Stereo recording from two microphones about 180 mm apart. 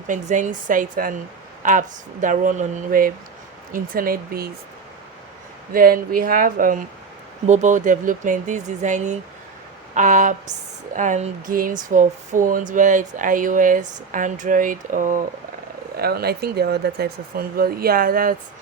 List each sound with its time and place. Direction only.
0.1 s speech: 45° right (ahead or behind)
5.7 s speech: 55° right (ahead or behind)
16.0 s speech: 60° right (ahead or behind)